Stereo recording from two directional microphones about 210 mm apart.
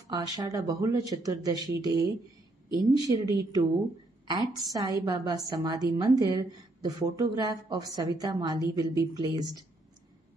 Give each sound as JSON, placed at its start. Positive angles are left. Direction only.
{"t": 0.1, "sound": "a woman's voice", "side_deg": -15}
{"t": 3.1, "sound": "a woman's voice", "side_deg": -15}